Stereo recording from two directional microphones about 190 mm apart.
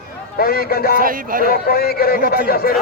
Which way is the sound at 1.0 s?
50° right (ahead or behind).